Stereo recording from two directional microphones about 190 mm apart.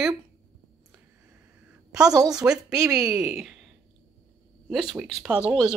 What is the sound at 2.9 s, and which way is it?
Speech, 15° right (ahead or behind).